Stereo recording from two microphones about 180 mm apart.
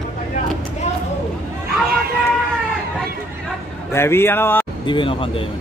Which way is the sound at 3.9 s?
15° left (ahead or behind).